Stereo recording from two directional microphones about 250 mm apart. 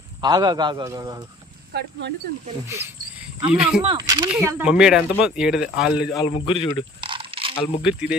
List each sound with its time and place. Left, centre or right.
0.2 s a man's voice: centre
1.7 s speech: right
2.6 s cricket: centre
3.5 s speech: centre
3.8 s a man's voice: centre
6.1 s a man's voice: centre
7.0 s coin: right
7.8 s speech: centre